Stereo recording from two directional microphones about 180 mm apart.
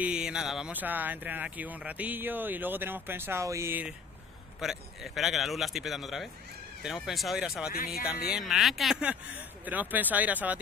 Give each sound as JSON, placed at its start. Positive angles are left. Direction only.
{"t": 0.0, "sound": "speech", "side_deg": -5}
{"t": 7.7, "sound": "speech", "side_deg": 55}
{"t": 8.3, "sound": "speech", "side_deg": 0}